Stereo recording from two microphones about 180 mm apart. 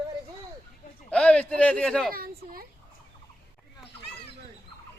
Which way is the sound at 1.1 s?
5° left (ahead or behind).